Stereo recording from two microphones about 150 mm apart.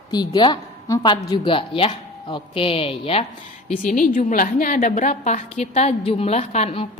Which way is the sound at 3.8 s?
60° left (ahead or behind).